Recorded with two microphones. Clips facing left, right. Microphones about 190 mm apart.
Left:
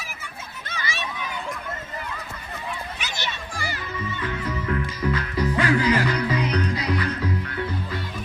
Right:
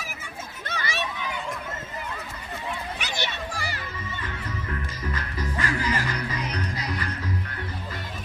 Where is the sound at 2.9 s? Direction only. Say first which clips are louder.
Right 1 dB; 60° right (ahead or behind).